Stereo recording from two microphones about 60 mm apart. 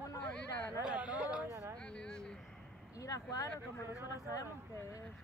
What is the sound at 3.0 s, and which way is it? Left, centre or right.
Speech, left.